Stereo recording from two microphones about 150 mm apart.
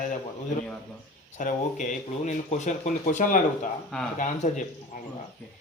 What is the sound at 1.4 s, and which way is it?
Speech, 60° left (ahead or behind).